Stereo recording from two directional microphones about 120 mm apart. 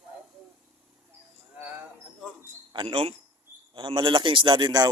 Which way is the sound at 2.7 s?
50° right (ahead or behind).